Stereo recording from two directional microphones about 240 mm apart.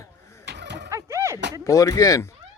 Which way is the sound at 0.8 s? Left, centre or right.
Centre.